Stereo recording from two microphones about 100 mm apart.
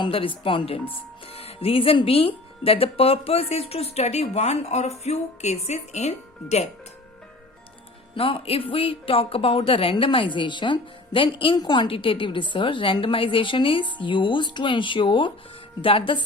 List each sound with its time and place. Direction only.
0.0 s speech: 60° left (ahead or behind); by 6.7 s 90° left
8.1 s a woman's voice: 60° left (ahead or behind)
11.5 s a woman's voice: 50° left (ahead or behind)